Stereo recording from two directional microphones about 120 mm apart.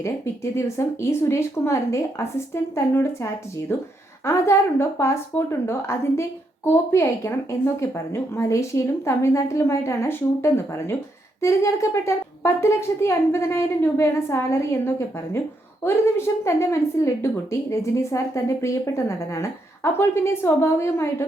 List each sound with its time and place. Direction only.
0.5 s a woman's voice: 25° left (ahead or behind)
4.3 s a woman's voice: 25° left (ahead or behind)